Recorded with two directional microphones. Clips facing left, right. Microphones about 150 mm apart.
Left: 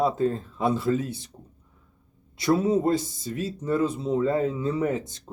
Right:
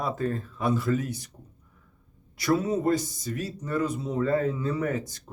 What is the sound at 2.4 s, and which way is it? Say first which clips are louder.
Speech: left 3 dB; 25° left (ahead or behind).